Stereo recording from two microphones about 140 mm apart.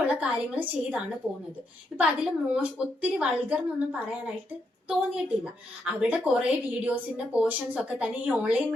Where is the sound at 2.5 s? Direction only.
10° right (ahead or behind).